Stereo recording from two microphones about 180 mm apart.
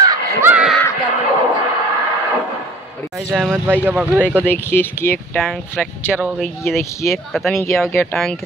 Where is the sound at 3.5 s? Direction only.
10° right (ahead or behind).